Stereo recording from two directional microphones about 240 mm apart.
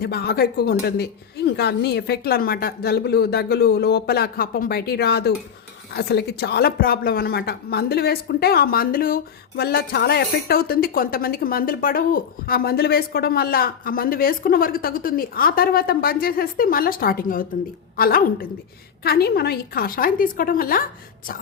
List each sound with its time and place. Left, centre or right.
0.0 s a woman's voice: left